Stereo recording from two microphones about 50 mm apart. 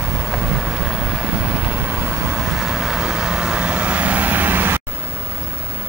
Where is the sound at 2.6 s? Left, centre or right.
Centre; by 4.8 s right.